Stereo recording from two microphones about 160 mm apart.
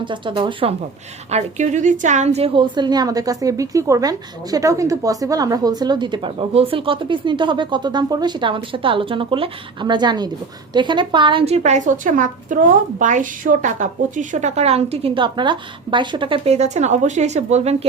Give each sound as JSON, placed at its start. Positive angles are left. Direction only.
{"t": 0.0, "sound": "a woman's voice", "side_deg": -30}
{"t": 1.3, "sound": "a woman's voice", "side_deg": -45}